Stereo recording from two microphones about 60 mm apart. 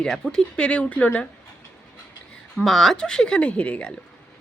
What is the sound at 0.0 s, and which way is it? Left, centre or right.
A woman's voice, centre.